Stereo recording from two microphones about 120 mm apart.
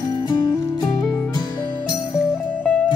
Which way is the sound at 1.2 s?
35° left (ahead or behind).